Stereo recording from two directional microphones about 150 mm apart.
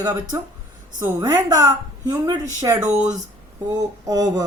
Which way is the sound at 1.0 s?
25° right (ahead or behind).